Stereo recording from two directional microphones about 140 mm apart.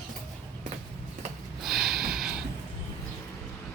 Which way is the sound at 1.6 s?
Centre (ahead or behind).